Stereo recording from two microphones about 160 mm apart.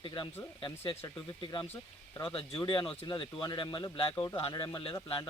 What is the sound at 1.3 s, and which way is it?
Speech, 25° left (ahead or behind).